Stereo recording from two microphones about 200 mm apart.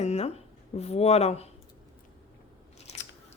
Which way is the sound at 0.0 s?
35° left (ahead or behind).